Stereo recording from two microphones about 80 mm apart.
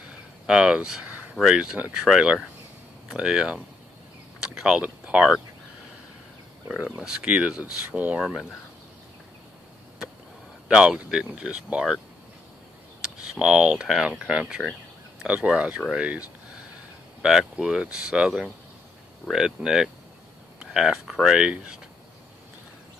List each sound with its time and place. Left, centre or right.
0.5 s speech: centre
6.8 s speech: centre
8.2 s speech: centre
10.7 s speech: centre
13.0 s speech: centre